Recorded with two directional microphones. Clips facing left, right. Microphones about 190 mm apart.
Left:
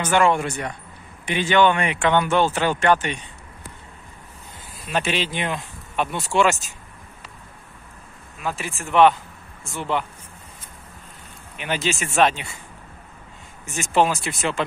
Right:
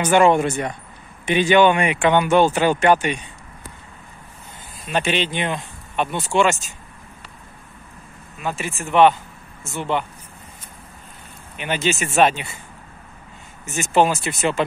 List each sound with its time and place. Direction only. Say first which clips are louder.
0.0 s speech: right 4 dB; 20° right (ahead or behind)
4.8 s speech: right 2 dB; centre (ahead or behind)
8.4 s speech: right 2 dB; centre (ahead or behind)
11.5 s speech: right 3 dB; centre (ahead or behind)
13.7 s speech: right 2 dB; centre (ahead or behind)